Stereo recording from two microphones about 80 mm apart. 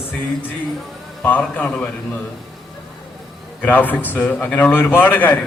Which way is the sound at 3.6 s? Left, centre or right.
Left.